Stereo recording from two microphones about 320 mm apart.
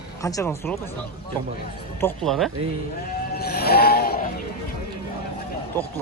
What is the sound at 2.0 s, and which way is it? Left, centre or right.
Speech, centre.